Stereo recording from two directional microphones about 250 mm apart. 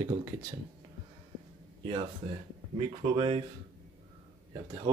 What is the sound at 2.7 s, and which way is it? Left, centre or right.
Speech, right.